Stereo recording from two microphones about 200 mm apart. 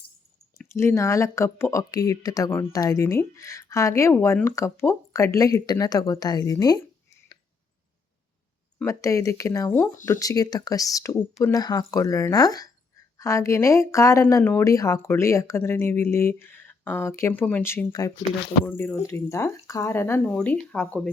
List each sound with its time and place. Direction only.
0.7 s speech: 15° left (ahead or behind)
8.8 s speech: 15° left (ahead or behind)